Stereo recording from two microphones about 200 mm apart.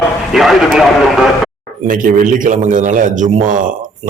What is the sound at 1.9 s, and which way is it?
A man's voice, 40° right (ahead or behind).